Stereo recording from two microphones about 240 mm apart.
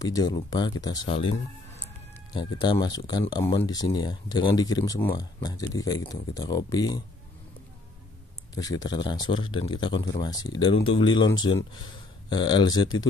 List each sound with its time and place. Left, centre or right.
0.0 s speech: centre
2.3 s speech: centre
8.5 s speech: centre